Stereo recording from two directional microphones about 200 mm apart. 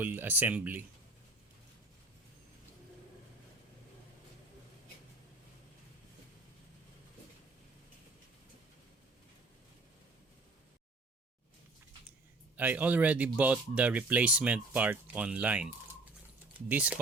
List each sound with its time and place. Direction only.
0.0 s speech: 10° right (ahead or behind)
12.5 s speech: 10° right (ahead or behind)